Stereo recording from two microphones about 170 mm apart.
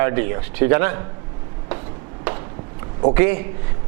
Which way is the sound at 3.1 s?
15° right (ahead or behind).